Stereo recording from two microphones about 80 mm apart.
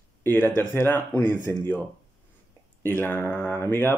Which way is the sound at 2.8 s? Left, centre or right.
Left.